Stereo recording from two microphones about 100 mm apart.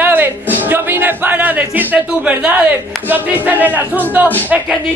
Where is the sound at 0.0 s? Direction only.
20° right (ahead or behind).